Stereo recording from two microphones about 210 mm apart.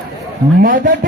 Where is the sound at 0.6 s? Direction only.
40° right (ahead or behind).